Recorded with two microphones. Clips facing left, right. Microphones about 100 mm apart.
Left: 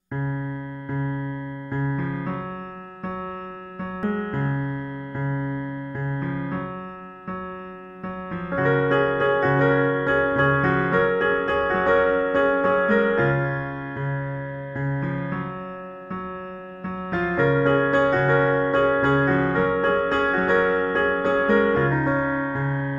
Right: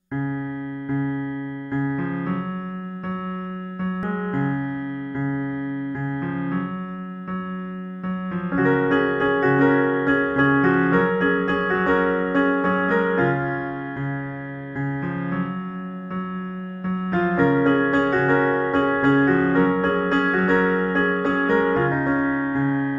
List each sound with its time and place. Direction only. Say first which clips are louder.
1.7 s music: right 3 dB; centre (ahead or behind)
4.0 s music: even; 5° right (ahead or behind)
8.3 s music: right 2 dB; centre (ahead or behind)
14.8 s music: right 2 dB; centre (ahead or behind)
17.3 s music: right 1 dB; centre (ahead or behind)